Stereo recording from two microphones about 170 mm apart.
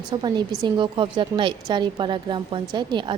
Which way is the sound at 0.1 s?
25° right (ahead or behind).